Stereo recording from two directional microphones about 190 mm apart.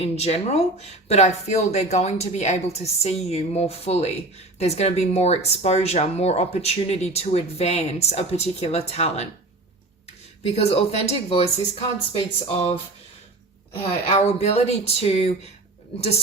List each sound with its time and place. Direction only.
0.0 s speech: 30° left (ahead or behind)
10.4 s speech: 35° left (ahead or behind)
13.8 s speech: 35° left (ahead or behind)